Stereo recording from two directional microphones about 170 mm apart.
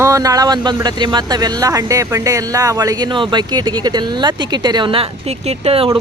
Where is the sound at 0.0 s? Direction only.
20° right (ahead or behind).